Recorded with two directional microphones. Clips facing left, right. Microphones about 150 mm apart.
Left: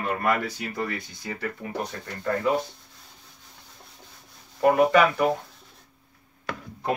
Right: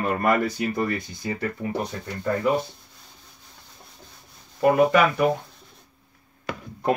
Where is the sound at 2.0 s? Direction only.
15° right (ahead or behind).